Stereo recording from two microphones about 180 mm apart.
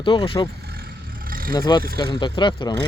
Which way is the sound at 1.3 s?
55° right (ahead or behind).